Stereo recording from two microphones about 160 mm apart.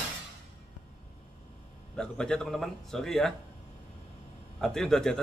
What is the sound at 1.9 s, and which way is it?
A man's voice, 5° left (ahead or behind).